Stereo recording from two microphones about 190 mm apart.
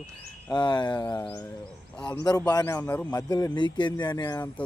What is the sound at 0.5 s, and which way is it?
Speech, 25° left (ahead or behind).